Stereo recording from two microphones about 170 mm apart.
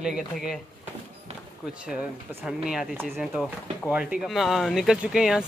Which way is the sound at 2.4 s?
5° right (ahead or behind).